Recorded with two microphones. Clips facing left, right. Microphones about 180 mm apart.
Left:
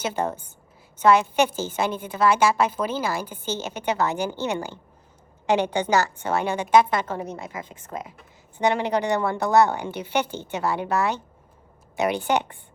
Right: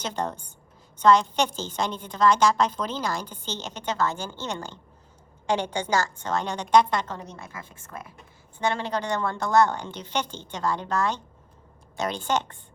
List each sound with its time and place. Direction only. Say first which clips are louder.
0.0 s a woman's voice: left 4 dB; 10° left (ahead or behind)
6.2 s a woman's voice: left 4 dB; 10° left (ahead or behind)
7.7 s a woman's voice: left 6 dB; 20° left (ahead or behind)